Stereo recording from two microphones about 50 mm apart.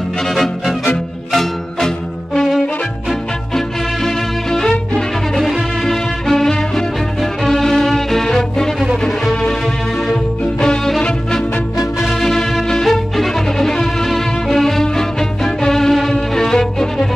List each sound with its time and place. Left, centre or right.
0.3 s music: centre
11.0 s music: centre